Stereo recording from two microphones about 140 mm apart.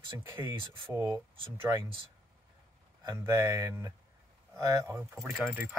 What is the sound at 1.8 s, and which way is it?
Speech, 40° right (ahead or behind).